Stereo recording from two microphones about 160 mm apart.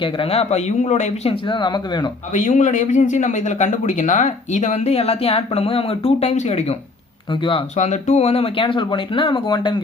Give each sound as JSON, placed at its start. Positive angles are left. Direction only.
{"t": 0.0, "sound": "speech", "side_deg": 35}
{"t": 2.3, "sound": "speech", "side_deg": 50}
{"t": 7.8, "sound": "speech", "side_deg": 45}